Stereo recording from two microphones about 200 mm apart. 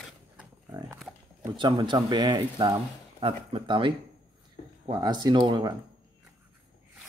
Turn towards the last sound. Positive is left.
turn(degrees=-25)  # may be behind; listen again after turning